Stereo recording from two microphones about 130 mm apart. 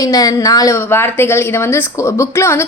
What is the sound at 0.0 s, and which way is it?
A woman's voice, 25° left (ahead or behind).